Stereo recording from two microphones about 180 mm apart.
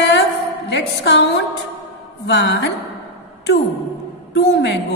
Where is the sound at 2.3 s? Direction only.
75° left (ahead or behind).